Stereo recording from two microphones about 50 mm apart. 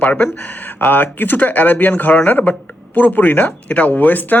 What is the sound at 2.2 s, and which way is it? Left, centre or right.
Speech, left.